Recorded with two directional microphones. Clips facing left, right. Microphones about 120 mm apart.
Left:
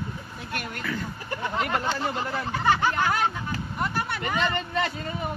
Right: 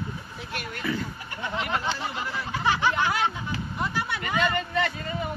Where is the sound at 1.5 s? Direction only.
45° left (ahead or behind).